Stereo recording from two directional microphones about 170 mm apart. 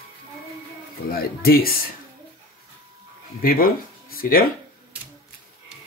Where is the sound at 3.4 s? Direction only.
60° left (ahead or behind).